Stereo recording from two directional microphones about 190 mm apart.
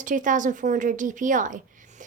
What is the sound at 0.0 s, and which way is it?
Speech, 40° right (ahead or behind).